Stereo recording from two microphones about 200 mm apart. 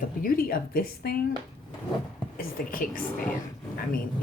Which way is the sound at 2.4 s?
45° left (ahead or behind).